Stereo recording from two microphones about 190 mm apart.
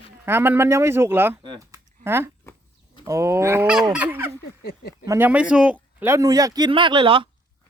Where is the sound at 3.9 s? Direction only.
10° right (ahead or behind).